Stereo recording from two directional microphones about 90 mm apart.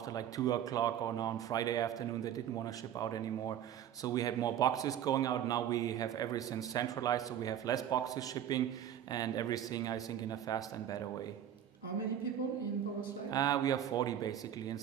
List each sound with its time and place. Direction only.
0.1 s a man's voice: 45° left (ahead or behind)
13.3 s a man's voice: 45° left (ahead or behind)